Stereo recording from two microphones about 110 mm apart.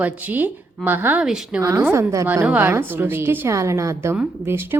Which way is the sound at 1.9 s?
25° right (ahead or behind).